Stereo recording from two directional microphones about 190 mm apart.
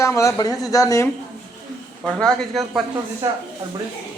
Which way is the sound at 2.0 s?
Centre (ahead or behind).